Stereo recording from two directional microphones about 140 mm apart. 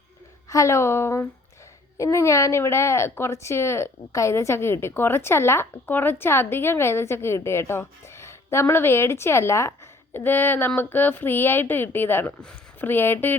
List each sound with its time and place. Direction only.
0.5 s a woman's voice: 20° left (ahead or behind)